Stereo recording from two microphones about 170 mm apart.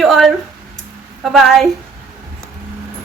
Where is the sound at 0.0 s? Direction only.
Centre (ahead or behind).